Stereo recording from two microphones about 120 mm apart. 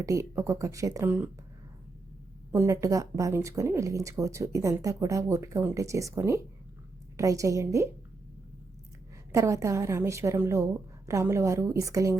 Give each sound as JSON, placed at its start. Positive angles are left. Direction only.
{"t": 0.0, "sound": "speech", "side_deg": -25}
{"t": 2.5, "sound": "speech", "side_deg": -25}
{"t": 9.3, "sound": "speech", "side_deg": -25}